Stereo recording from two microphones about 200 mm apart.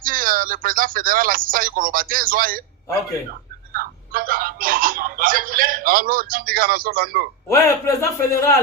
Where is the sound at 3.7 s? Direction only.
45° right (ahead or behind).